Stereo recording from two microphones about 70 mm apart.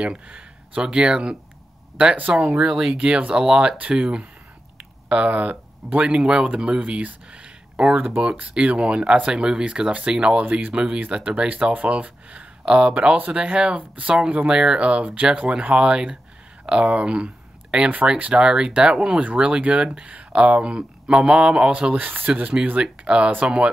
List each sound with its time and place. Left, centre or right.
0.0 s speech: centre
2.4 s speech: centre
3.0 s speech: centre
21.9 s speech: right